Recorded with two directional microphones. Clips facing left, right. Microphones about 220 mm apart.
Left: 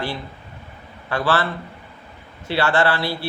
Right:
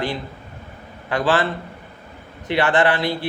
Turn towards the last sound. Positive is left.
turn(degrees=-20)  # may be behind; listen again after turning